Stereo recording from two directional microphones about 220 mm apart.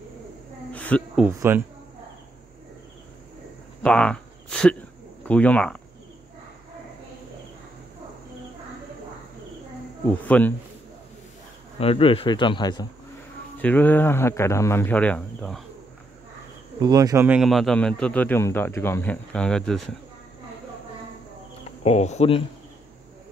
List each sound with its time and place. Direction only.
0.7 s cricket: 5° left (ahead or behind)
1.2 s speech: 10° right (ahead or behind)
3.8 s speech: 5° left (ahead or behind)
10.0 s speech: 5° left (ahead or behind)
11.8 s speech: 25° left (ahead or behind)
13.6 s speech: 5° left (ahead or behind)
16.8 s speech: 15° right (ahead or behind); by 20.0 s centre (ahead or behind)
21.6 s speech: 30° left (ahead or behind)